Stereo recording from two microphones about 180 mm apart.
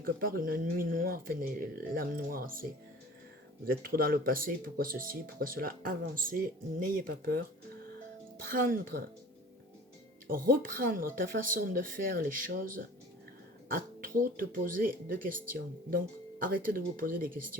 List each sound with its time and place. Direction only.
0.0 s speech: 55° right (ahead or behind)
3.7 s speech: 55° right (ahead or behind)
10.2 s speech: 50° right (ahead or behind)